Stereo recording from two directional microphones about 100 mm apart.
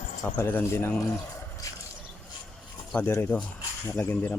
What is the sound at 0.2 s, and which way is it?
Speech, 20° left (ahead or behind).